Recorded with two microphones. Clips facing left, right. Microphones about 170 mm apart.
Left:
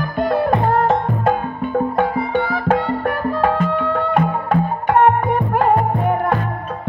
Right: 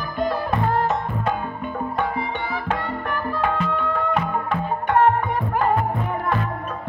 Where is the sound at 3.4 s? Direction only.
50° left (ahead or behind).